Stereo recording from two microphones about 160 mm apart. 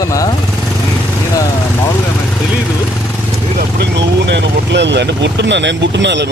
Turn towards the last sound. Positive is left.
turn(degrees=-90)